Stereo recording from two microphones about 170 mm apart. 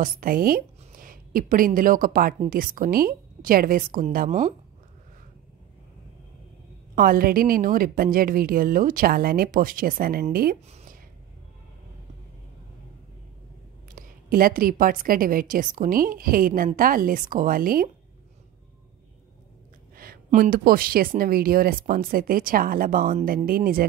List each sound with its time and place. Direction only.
0.0 s a woman's voice: 55° right (ahead or behind)
7.0 s a woman's voice: 60° right (ahead or behind)
13.8 s a woman's voice: 55° right (ahead or behind)
20.0 s a woman's voice: 55° right (ahead or behind)